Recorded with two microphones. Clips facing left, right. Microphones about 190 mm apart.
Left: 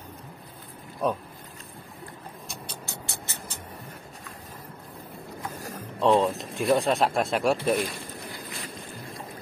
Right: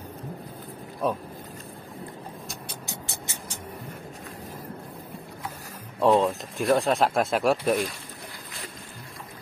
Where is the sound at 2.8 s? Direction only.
15° right (ahead or behind).